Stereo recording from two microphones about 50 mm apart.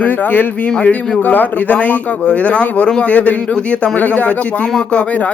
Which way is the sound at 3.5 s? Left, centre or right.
Left.